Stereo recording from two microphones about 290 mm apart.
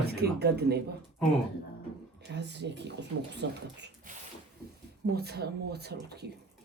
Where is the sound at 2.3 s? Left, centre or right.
Right.